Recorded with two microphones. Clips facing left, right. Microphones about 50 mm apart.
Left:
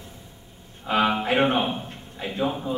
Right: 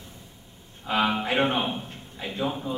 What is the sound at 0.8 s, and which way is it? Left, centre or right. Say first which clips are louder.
A man's voice: left 3 dB; centre.